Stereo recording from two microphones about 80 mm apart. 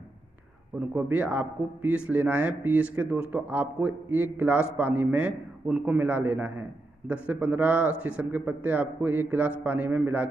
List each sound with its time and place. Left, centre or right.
0.7 s a man's voice: right